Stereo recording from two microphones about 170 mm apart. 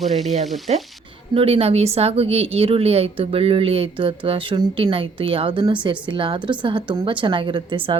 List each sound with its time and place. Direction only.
0.0 s frying: centre (ahead or behind)
0.7 s a woman's voice: 40° right (ahead or behind)